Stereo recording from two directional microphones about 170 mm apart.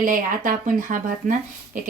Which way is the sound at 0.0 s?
50° right (ahead or behind).